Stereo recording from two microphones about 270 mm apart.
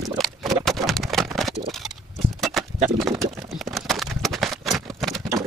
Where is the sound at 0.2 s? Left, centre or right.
Centre.